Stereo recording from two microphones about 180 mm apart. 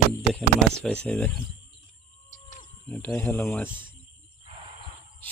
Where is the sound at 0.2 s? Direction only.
5° left (ahead or behind).